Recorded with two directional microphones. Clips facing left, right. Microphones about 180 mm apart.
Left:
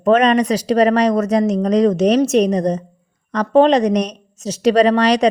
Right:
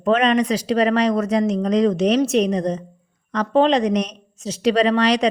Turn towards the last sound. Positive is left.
turn(degrees=40)  # may be behind; listen again after turning